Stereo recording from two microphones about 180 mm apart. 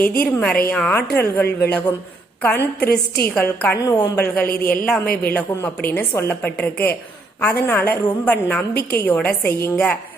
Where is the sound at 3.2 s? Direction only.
10° left (ahead or behind).